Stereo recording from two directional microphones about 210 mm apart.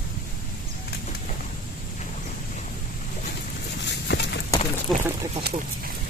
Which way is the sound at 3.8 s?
55° left (ahead or behind).